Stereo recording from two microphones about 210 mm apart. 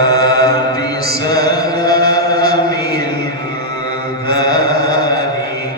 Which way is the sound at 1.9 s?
45° right (ahead or behind).